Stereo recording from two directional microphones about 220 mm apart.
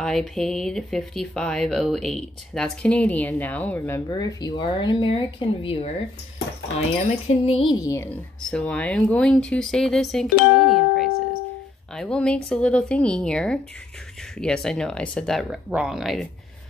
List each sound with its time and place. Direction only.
0.0 s speech: centre (ahead or behind); by 5.9 s 25° left (ahead or behind)
7.2 s speech: 25° left (ahead or behind)
8.5 s speech: 5° left (ahead or behind)